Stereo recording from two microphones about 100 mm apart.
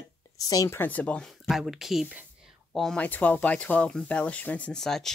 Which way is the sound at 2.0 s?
15° right (ahead or behind).